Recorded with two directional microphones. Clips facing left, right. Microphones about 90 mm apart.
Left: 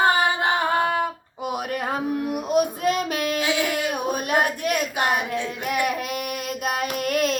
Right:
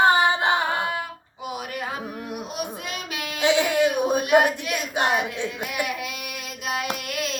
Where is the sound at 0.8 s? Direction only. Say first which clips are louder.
Left 5 dB; 45° left (ahead or behind).